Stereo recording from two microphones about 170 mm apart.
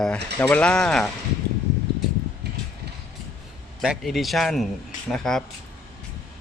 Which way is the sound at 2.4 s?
75° right (ahead or behind).